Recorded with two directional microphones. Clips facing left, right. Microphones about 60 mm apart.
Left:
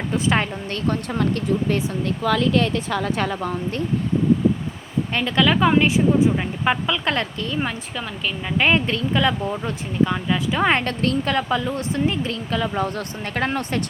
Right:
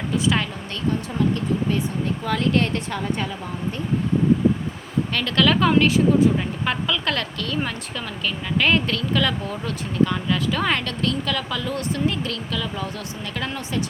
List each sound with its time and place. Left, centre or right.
0.1 s a woman's voice: left
0.9 s speech: left
3.0 s speech: left
5.1 s speech: centre; by 13.8 s left